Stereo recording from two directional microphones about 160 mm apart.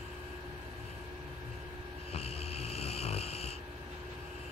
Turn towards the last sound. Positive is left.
turn(degrees=40)  # may be behind; listen again after turning